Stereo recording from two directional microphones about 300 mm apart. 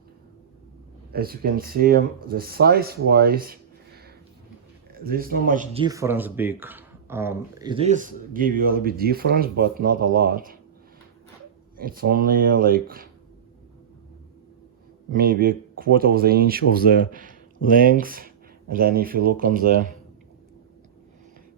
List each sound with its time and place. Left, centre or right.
1.1 s speech: right
5.8 s speech: centre; by 10.6 s right
11.8 s speech: right
15.1 s speech: right